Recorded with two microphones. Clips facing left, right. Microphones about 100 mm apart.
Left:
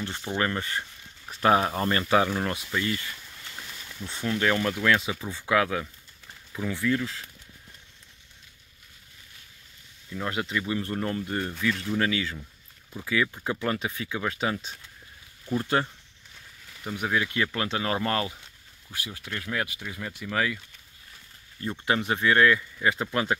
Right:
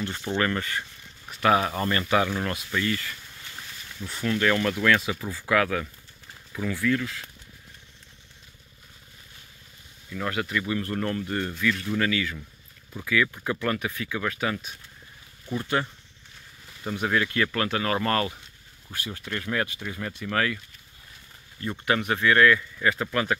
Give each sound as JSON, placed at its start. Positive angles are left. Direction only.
{"t": 0.4, "sound": "speech", "side_deg": 20}
{"t": 10.1, "sound": "speech", "side_deg": 20}
{"t": 16.9, "sound": "speech", "side_deg": 10}
{"t": 21.8, "sound": "speech", "side_deg": 25}